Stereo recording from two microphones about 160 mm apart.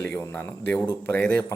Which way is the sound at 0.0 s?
15° left (ahead or behind).